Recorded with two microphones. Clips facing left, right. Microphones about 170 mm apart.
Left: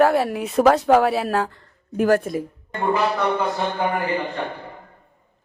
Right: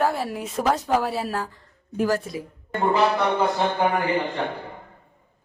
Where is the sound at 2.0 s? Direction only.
55° left (ahead or behind).